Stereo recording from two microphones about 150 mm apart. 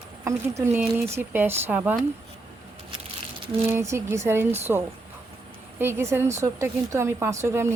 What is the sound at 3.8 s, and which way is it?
Speech, 20° right (ahead or behind).